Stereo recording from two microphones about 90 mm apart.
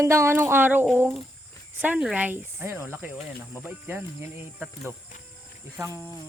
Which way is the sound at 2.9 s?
10° right (ahead or behind).